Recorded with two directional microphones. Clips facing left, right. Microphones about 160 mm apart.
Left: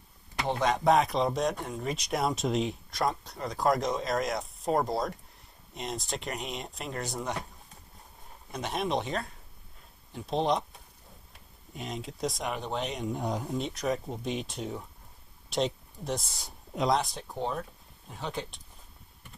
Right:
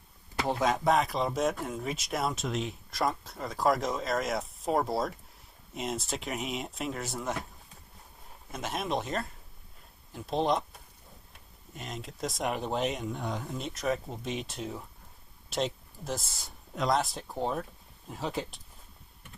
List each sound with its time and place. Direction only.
0.4 s speech: centre (ahead or behind)
8.5 s speech: centre (ahead or behind)